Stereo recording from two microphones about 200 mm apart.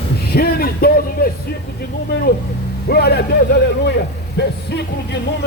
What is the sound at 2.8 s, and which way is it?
A man's voice, 55° left (ahead or behind).